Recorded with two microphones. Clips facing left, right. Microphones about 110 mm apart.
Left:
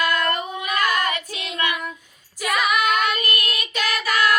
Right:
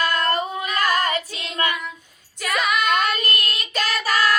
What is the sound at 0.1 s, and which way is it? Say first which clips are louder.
Singing: even; 35° right (ahead or behind).